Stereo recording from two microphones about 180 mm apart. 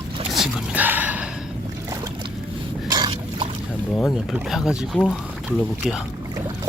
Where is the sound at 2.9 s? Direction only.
25° right (ahead or behind).